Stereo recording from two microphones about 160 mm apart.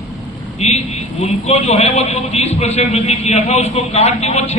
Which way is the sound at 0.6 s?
45° left (ahead or behind).